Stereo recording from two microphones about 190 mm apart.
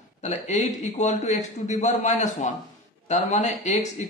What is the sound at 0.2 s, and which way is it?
Speech, 35° left (ahead or behind).